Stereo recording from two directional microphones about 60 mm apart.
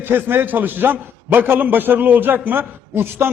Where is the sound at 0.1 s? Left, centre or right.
Right.